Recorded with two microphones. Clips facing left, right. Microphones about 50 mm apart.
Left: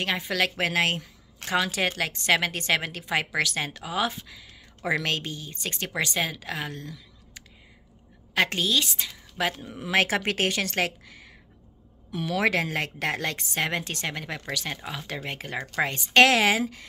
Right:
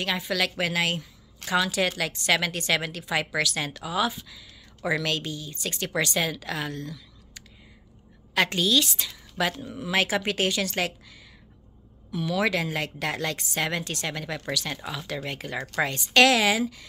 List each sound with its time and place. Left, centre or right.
0.0 s a woman's voice: left
9.8 s a woman's voice: left